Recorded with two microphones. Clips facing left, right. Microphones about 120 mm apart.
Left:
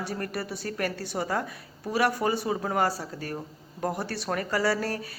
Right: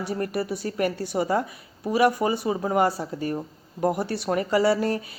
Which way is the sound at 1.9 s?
5° right (ahead or behind).